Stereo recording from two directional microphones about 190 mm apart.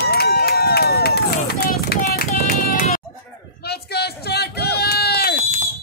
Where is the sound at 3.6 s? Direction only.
60° left (ahead or behind).